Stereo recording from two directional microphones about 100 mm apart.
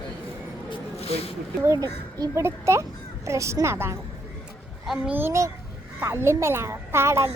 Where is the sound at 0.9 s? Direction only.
90° left.